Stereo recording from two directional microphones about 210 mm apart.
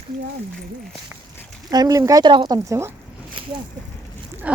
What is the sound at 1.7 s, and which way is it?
Speech, 20° right (ahead or behind).